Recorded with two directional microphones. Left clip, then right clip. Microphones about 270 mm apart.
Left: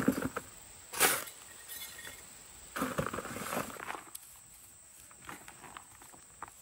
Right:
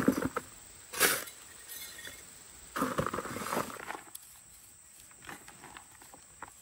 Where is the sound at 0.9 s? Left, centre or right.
Left.